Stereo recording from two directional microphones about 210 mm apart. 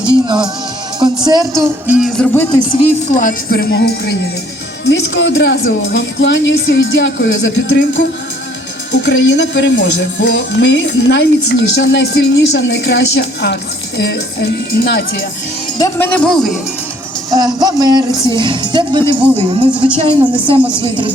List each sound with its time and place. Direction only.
0.0 s music: 20° right (ahead or behind)
0.9 s speech: 20° right (ahead or behind)
2.0 s speech: centre (ahead or behind); by 2.8 s 20° left (ahead or behind)
3.1 s speech: 40° left (ahead or behind)
15.8 s a man's voice: 10° left (ahead or behind)
17.3 s speech: 20° right (ahead or behind)
19.1 s a man's voice: 5° right (ahead or behind)
20.0 s speech: 25° right (ahead or behind)